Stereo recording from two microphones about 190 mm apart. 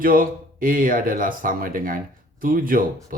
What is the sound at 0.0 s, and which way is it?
Speech, 50° right (ahead or behind).